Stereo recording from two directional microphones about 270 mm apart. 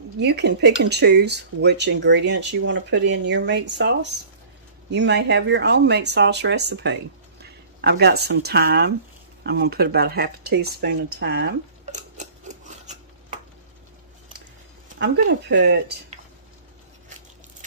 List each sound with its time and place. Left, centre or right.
0.2 s speech: right
11.8 s scissors: right
15.0 s speech: right